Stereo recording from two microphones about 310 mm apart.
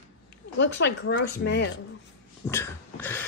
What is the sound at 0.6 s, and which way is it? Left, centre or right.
Speech, left.